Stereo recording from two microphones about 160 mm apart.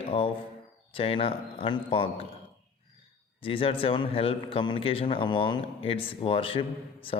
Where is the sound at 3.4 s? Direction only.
35° left (ahead or behind).